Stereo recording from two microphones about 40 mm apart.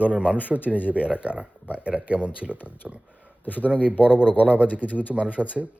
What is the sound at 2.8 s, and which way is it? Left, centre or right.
Speech, centre.